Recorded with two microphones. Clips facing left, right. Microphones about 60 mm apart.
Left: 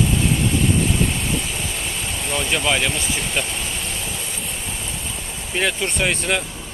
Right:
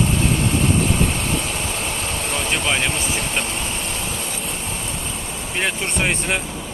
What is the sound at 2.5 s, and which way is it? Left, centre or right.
Speech, centre.